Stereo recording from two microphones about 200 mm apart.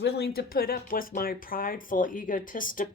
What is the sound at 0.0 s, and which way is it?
Speech, 55° left (ahead or behind).